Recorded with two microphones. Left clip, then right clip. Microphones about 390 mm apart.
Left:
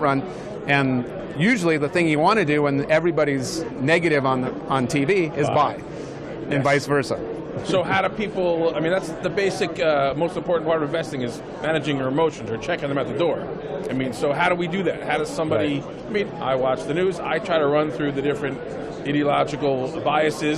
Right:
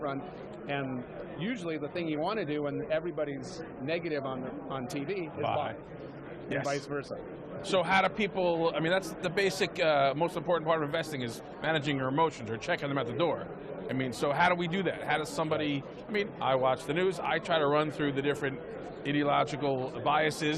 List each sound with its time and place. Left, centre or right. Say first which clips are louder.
1.4 s speech: left 16 dB; left
6.7 s speech: left 14 dB; left
7.7 s a man's voice: left 6 dB; right